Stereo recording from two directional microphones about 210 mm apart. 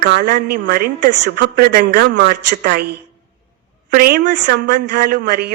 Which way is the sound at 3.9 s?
45° right (ahead or behind).